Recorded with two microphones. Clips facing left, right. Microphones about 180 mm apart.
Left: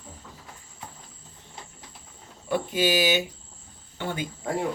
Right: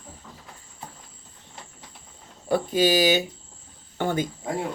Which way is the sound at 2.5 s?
40° right (ahead or behind).